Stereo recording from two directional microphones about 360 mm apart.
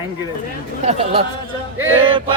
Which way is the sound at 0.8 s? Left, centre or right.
Centre.